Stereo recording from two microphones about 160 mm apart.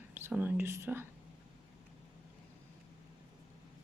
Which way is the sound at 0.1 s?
15° right (ahead or behind).